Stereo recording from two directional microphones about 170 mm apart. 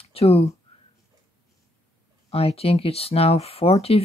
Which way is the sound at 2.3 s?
35° left (ahead or behind).